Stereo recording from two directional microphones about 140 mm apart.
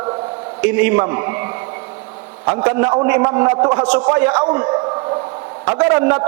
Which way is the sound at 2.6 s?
20° right (ahead or behind).